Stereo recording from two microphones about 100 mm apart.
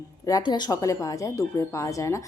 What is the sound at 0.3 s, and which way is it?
Speech, 45° left (ahead or behind).